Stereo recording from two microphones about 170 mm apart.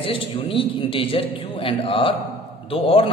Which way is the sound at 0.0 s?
30° left (ahead or behind).